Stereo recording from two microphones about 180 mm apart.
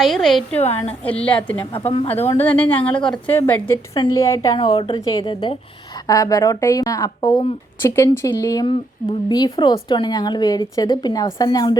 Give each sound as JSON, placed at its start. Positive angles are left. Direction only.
{"t": 0.0, "sound": "a woman's voice", "side_deg": 0}
{"t": 1.7, "sound": "speech", "side_deg": 30}
{"t": 2.0, "sound": "a woman's voice", "side_deg": 10}